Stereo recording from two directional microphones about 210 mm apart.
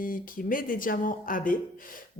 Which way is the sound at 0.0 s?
40° left (ahead or behind).